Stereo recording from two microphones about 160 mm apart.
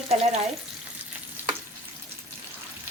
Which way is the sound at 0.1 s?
45° right (ahead or behind).